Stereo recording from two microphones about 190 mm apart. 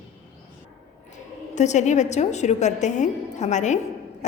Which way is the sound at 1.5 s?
40° left (ahead or behind).